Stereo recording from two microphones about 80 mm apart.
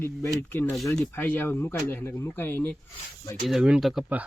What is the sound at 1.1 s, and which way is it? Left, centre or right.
Speech, left.